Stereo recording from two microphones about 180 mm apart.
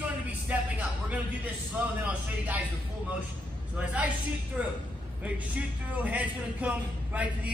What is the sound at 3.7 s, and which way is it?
A man's voice, 10° right (ahead or behind).